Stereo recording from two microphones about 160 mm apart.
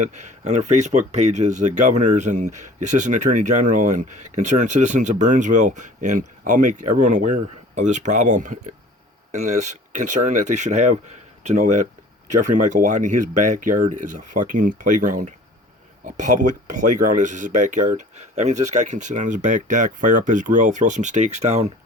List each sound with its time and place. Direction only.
0.0 s speech: 45° right (ahead or behind)